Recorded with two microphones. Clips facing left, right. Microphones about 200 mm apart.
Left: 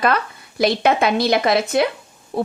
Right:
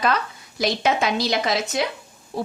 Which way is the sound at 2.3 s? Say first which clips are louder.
Left 5 dB; 55° left (ahead or behind).